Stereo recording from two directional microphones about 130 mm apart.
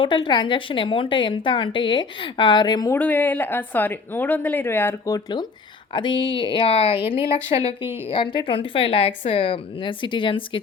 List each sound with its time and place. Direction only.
0.0 s a woman's voice: 40° left (ahead or behind)
2.9 s a woman's voice: 15° left (ahead or behind); by 10.6 s 40° left (ahead or behind)